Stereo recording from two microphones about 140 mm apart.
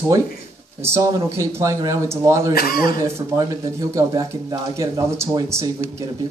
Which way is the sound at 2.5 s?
90° left.